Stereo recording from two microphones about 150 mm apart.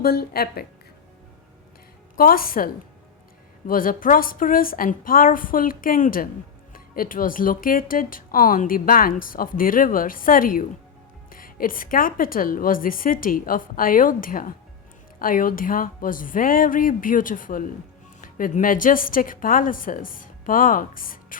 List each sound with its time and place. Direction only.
0.0 s a woman's voice: 85° left
2.1 s speech: 75° left (ahead or behind)
3.7 s a woman's voice: 65° left (ahead or behind)